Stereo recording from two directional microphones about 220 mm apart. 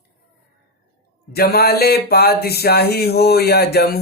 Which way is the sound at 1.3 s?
45° left (ahead or behind).